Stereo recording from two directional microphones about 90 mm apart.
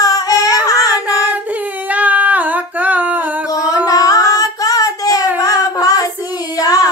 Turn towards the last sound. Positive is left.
turn(degrees=40)  # may be behind; listen again after turning